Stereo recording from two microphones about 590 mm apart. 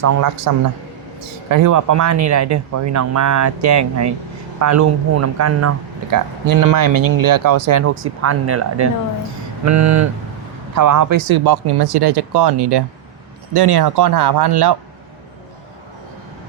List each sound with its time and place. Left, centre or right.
0.0 s a man's voice: right
9.6 s a man's voice: right